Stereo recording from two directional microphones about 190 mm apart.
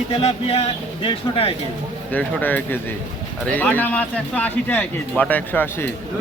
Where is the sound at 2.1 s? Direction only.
10° left (ahead or behind).